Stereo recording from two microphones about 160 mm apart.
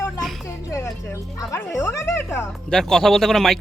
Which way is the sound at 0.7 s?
20° left (ahead or behind).